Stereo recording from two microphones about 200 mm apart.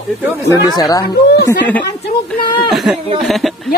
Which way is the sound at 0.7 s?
20° left (ahead or behind).